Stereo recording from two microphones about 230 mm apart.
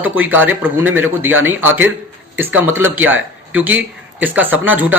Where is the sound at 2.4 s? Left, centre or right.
Centre.